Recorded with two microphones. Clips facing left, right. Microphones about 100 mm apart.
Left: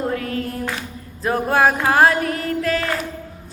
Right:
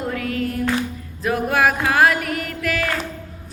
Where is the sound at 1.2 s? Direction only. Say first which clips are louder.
Left 2 dB; 30° left (ahead or behind).